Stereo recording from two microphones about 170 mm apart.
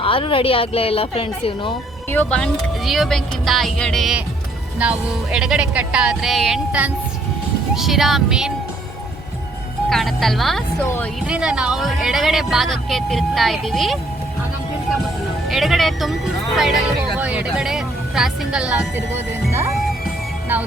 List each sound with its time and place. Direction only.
0.0 s a woman's voice: 30° left (ahead or behind)
2.0 s speech: 10° left (ahead or behind)
9.9 s speech: centre (ahead or behind)
10.8 s speech: 10° left (ahead or behind)
11.2 s speech: 5° right (ahead or behind)
15.4 s speech: centre (ahead or behind)
19.5 s music: 15° right (ahead or behind)